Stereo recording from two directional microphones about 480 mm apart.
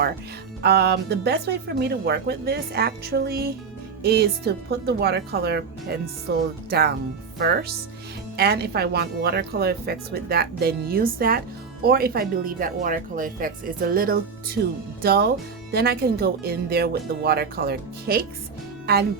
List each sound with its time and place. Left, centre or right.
0.6 s speech: centre